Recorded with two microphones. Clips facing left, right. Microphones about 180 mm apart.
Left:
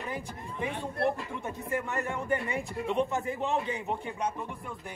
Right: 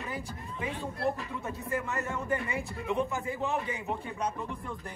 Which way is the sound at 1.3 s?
20° left (ahead or behind).